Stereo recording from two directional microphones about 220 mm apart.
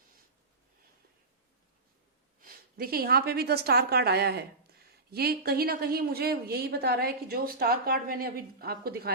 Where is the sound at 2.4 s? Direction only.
40° right (ahead or behind).